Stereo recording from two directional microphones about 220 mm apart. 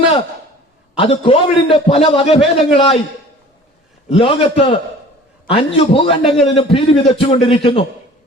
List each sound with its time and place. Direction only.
0.9 s a man's voice: 25° left (ahead or behind)
4.1 s a man's voice: 25° left (ahead or behind)